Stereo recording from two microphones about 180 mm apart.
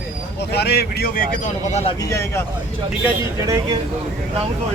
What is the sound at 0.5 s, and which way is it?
Speech, 65° left (ahead or behind).